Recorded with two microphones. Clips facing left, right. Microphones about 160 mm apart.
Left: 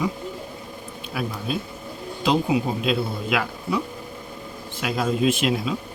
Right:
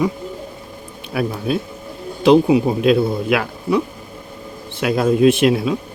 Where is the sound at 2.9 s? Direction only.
60° right (ahead or behind).